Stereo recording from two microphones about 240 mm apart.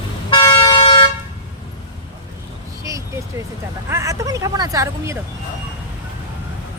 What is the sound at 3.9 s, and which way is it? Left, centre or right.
Speech, centre.